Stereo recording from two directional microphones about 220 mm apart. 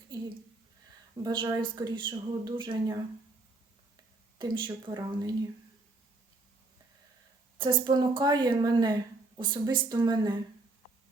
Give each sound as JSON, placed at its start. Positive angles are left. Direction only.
{"t": 1.1, "sound": "a woman's voice", "side_deg": -20}
{"t": 4.4, "sound": "a woman's voice", "side_deg": -20}
{"t": 7.6, "sound": "a woman's voice", "side_deg": -20}